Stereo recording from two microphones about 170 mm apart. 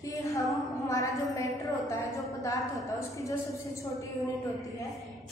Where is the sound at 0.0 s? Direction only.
20° left (ahead or behind).